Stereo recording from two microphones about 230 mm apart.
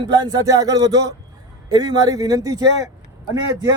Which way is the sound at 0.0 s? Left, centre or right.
Centre.